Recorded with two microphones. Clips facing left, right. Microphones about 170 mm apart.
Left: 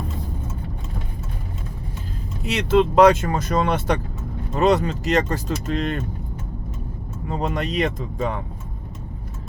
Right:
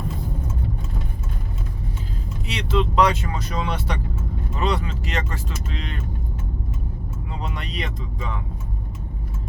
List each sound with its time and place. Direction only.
2.5 s speech: 45° left (ahead or behind)
7.3 s speech: 45° left (ahead or behind)